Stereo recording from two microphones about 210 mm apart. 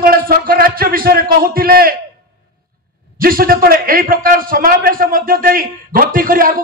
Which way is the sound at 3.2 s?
45° right (ahead or behind).